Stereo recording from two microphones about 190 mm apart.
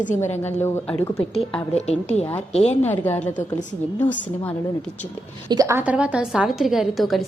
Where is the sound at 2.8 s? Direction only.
10° left (ahead or behind).